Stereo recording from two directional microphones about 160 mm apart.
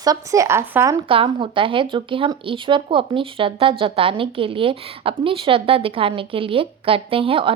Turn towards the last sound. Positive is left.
turn(degrees=-35)  # may be behind; listen again after turning